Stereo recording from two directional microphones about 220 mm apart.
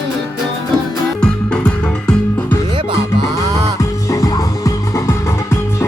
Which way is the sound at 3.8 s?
15° left (ahead or behind).